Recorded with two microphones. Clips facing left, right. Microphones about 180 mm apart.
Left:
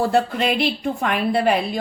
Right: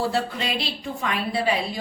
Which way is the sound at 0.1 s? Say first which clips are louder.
Left 7 dB; 55° left (ahead or behind).